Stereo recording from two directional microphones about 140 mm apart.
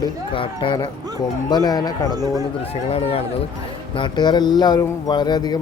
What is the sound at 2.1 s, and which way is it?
Speech, 25° right (ahead or behind).